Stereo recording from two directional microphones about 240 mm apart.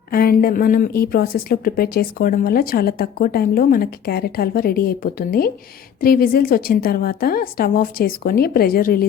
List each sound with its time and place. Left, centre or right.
0.1 s a woman's voice: left